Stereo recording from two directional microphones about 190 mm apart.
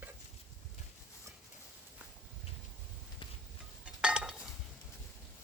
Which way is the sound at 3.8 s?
5° right (ahead or behind).